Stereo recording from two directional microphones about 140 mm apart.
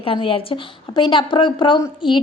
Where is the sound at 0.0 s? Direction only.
40° left (ahead or behind).